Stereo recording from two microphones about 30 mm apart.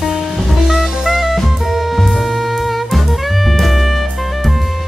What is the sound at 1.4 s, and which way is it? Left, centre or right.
Drum kit, centre.